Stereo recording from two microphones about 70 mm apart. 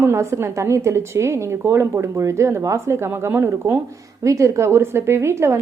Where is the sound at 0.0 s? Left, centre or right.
Right.